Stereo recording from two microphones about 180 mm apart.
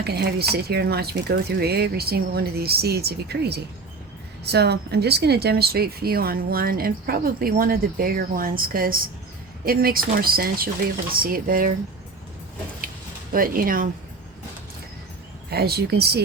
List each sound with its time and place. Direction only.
0.0 s a woman's voice: 60° right (ahead or behind)
13.3 s speech: 50° right (ahead or behind)
15.4 s a woman's voice: 60° right (ahead or behind)